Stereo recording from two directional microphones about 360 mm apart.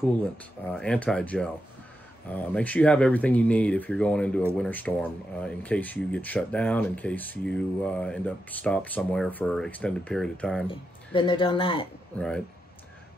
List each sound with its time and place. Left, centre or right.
0.4 s speech: centre
10.7 s speech: centre